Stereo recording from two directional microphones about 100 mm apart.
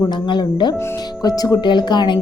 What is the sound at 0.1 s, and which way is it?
A woman's voice, 45° left (ahead or behind).